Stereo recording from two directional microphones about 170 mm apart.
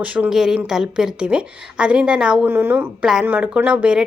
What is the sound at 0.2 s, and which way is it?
A woman's voice, 5° right (ahead or behind).